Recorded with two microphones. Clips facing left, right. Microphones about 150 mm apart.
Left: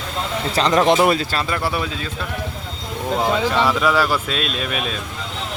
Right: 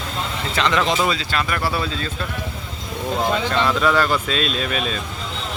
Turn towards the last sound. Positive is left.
turn(degrees=5)  # may be behind; listen again after turning